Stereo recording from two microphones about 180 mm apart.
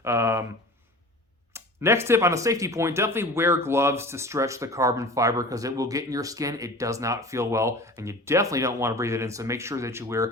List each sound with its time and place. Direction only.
0.0 s speech: 15° right (ahead or behind)
1.5 s speech: 15° right (ahead or behind)